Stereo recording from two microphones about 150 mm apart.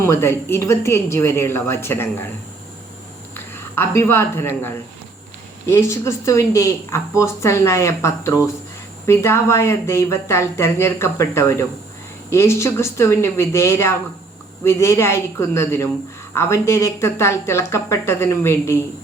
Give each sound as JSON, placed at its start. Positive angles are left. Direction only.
{"t": 0.0, "sound": "speech", "side_deg": 15}
{"t": 3.3, "sound": "a woman's voice", "side_deg": 15}